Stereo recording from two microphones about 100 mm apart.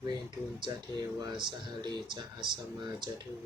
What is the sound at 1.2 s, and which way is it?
Speech, 45° right (ahead or behind).